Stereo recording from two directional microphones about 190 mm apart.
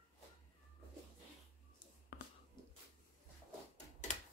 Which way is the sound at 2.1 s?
50° left (ahead or behind).